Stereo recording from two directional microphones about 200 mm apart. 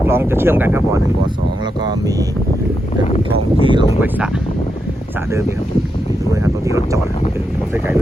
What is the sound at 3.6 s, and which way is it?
Speech, 25° right (ahead or behind).